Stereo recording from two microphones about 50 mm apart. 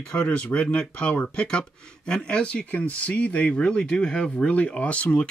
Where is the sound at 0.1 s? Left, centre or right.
Left.